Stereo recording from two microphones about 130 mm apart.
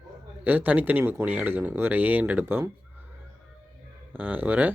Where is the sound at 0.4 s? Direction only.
15° right (ahead or behind).